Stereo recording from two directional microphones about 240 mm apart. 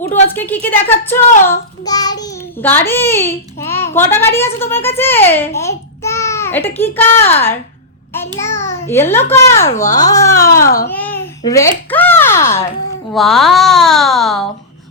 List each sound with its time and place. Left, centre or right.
0.3 s a child's voice: centre
10.7 s a child's voice: left
10.9 s babbling: centre
13.1 s a child's voice: centre